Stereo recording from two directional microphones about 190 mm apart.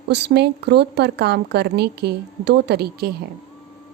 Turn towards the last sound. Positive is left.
turn(degrees=-55)  # may be behind; listen again after turning